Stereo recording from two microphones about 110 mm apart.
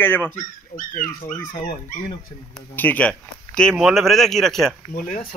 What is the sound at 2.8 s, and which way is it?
A man's voice, 15° left (ahead or behind).